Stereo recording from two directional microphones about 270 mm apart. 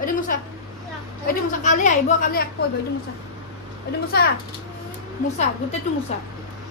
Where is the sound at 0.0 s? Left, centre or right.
Left.